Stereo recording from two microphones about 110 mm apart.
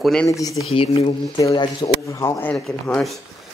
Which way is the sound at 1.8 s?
30° left (ahead or behind).